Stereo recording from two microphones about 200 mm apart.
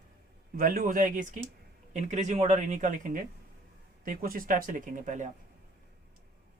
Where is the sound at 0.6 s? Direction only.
45° right (ahead or behind).